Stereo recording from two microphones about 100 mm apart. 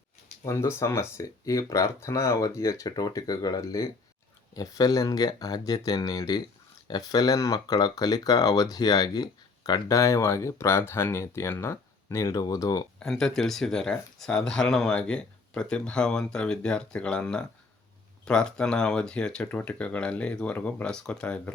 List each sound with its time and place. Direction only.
0.4 s speech: 30° left (ahead or behind)
13.0 s speech: 5° left (ahead or behind)